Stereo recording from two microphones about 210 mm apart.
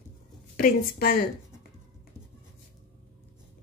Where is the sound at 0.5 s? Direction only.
40° left (ahead or behind).